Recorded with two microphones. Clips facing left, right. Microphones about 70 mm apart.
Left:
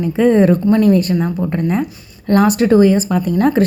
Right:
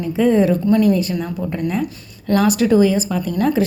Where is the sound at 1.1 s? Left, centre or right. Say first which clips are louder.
Left 5 dB; left.